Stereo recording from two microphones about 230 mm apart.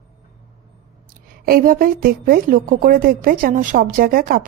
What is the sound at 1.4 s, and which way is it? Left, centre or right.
A woman's voice, right.